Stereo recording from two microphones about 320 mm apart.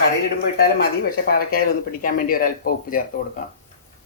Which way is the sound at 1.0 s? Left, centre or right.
Left.